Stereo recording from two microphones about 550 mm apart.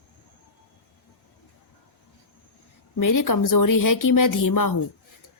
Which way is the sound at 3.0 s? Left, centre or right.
Left.